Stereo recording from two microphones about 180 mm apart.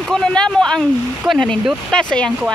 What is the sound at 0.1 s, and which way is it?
Speech, 5° left (ahead or behind).